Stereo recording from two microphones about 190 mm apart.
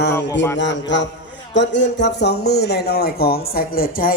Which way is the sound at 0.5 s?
70° left (ahead or behind).